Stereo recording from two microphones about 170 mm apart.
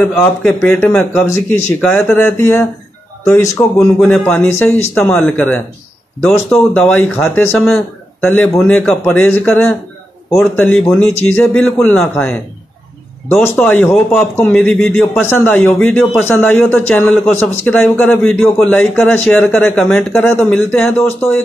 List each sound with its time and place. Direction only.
0.0 s a man's voice: 5° left (ahead or behind)
3.7 s a man's voice: 5° left (ahead or behind)